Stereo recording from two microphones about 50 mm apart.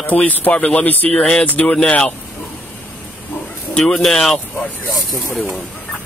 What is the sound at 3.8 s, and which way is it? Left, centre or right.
Speech, centre.